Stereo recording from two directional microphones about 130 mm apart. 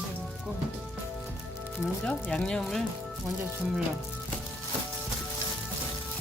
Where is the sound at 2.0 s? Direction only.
10° left (ahead or behind).